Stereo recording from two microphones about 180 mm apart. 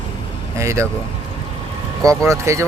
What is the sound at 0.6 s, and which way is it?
Speech, 15° right (ahead or behind).